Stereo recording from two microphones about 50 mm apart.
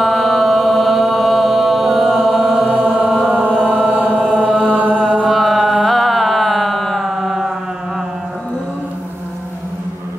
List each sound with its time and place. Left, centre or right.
0.0 s chant: centre
2.7 s chant: right
5.2 s chant: centre
5.8 s music: centre